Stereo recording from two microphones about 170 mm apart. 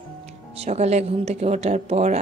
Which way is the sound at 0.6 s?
40° right (ahead or behind).